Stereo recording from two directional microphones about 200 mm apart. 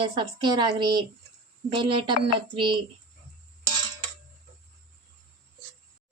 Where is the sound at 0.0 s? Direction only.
25° right (ahead or behind).